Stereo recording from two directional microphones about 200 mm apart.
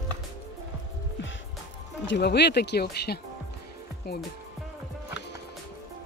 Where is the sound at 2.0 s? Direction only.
60° left (ahead or behind).